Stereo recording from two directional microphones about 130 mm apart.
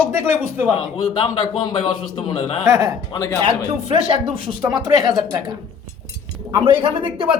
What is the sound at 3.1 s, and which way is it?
Speech, 20° left (ahead or behind).